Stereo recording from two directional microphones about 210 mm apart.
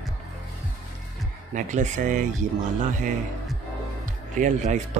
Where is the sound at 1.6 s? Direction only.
35° right (ahead or behind).